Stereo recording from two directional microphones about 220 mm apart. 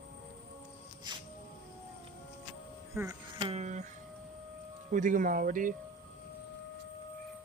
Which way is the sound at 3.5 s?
30° right (ahead or behind).